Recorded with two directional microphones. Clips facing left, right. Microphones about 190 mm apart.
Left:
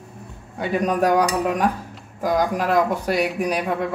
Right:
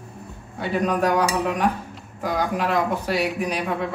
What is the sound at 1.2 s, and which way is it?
Speech, 40° left (ahead or behind).